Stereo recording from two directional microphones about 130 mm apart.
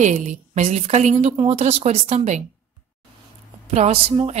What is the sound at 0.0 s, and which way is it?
A woman's voice, 70° right (ahead or behind).